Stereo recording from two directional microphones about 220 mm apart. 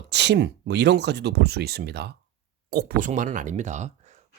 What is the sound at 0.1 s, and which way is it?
Speech, 50° right (ahead or behind).